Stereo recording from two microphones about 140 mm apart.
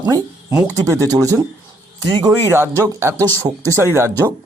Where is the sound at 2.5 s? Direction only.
15° right (ahead or behind).